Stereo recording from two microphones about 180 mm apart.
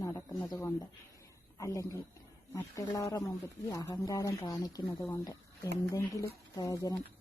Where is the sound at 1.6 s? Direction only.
20° left (ahead or behind).